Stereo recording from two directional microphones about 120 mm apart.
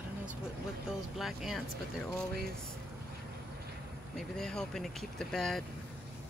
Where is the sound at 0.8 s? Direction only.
5° right (ahead or behind).